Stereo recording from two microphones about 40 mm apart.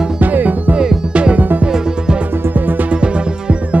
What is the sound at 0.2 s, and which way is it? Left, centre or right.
Music, right.